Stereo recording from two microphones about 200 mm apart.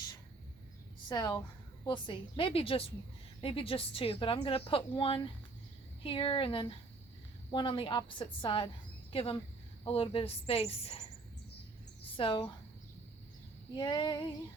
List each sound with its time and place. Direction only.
1.0 s a woman's voice: 20° left (ahead or behind)
12.1 s a woman's voice: 25° left (ahead or behind)
13.7 s a woman's voice: 20° left (ahead or behind)